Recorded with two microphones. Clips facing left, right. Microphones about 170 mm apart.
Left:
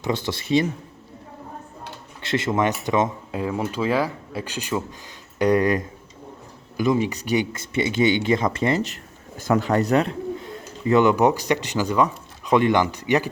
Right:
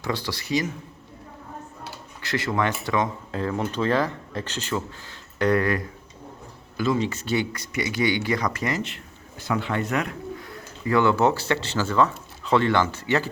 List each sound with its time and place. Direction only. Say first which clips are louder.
0.0 s speech: left 3 dB; 20° left (ahead or behind)
2.2 s a man's voice: left 3 dB; 25° left (ahead or behind)